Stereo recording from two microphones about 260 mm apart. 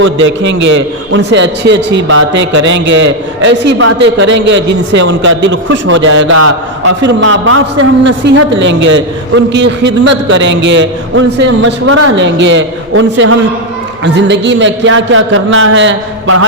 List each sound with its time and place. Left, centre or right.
0.0 s a man's voice: right